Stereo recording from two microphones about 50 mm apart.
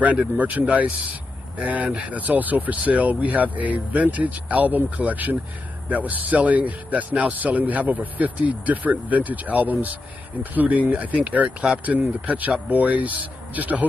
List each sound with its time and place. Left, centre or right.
0.4 s a man's voice: right